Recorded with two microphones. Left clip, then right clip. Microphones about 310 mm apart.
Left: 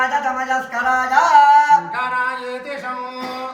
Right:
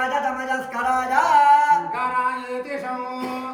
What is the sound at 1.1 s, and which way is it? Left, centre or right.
Music, centre.